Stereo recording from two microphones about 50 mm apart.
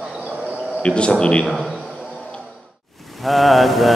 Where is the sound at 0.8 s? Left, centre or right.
Left.